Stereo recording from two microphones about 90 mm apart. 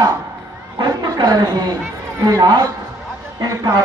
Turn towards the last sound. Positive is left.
turn(degrees=-45)  # may be behind; listen again after turning